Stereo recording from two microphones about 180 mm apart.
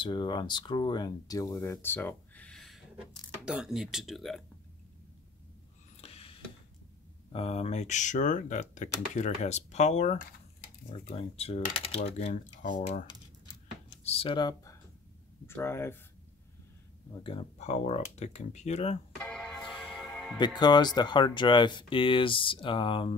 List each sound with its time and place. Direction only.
0.0 s speech: 25° left (ahead or behind); by 4.4 s centre (ahead or behind)
5.9 s a sound: 35° left (ahead or behind)
7.3 s speech: 35° left (ahead or behind)
11.1 s speech: 35° left (ahead or behind)
13.8 s a sound: 30° left (ahead or behind)
15.4 s speech: 15° left (ahead or behind)
17.2 s speech: 30° left (ahead or behind)
19.2 s music: centre (ahead or behind)
20.3 s speech: 25° left (ahead or behind)